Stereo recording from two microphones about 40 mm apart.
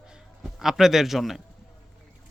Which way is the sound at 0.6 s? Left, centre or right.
Centre.